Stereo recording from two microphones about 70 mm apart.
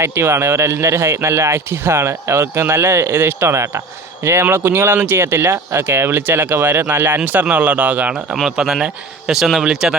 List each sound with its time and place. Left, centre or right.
0.0 s speech: right
8.4 s a man's voice: centre